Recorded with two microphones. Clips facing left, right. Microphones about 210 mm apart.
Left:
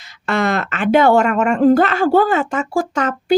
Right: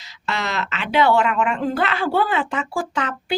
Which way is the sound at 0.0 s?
50° left (ahead or behind).